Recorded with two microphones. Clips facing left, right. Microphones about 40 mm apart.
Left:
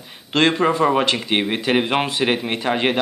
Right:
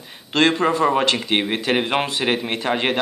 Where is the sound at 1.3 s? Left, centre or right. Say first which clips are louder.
Left 1 dB; centre.